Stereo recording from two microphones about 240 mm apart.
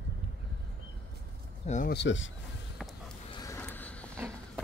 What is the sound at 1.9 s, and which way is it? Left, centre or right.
Speech, left.